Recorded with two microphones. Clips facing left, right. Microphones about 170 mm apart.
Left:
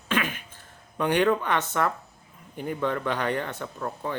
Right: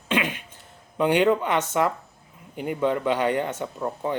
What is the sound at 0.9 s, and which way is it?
Speech, 15° right (ahead or behind).